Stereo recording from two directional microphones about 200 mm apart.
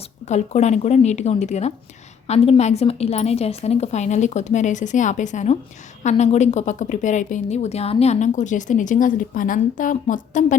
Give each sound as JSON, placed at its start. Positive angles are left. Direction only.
{"t": 0.3, "sound": "a woman's voice", "side_deg": 35}